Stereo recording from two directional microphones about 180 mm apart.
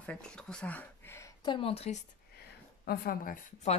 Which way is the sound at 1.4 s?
30° left (ahead or behind).